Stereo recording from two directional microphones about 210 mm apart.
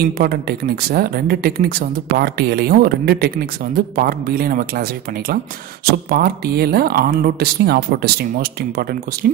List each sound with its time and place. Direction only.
0.2 s speech: 45° right (ahead or behind)
5.9 s speech: 45° right (ahead or behind)